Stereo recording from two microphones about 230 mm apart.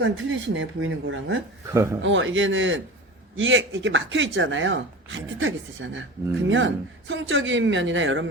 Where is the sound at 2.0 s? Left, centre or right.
Right.